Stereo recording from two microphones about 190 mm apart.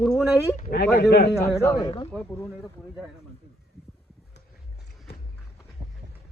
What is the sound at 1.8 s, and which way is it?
Speech, 30° left (ahead or behind).